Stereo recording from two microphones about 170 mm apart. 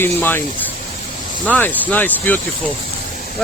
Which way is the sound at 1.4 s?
10° left (ahead or behind).